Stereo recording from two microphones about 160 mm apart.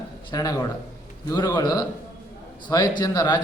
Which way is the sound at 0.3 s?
20° left (ahead or behind).